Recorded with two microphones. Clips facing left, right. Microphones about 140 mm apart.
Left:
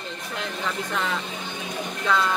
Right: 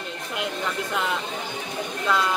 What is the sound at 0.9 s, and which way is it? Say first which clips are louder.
Speech: right 1 dB; 10° right (ahead or behind).